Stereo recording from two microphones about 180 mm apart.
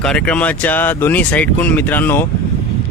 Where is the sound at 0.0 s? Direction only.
5° left (ahead or behind).